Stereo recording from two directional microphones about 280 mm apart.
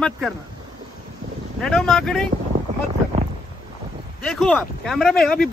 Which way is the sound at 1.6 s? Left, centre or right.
Centre.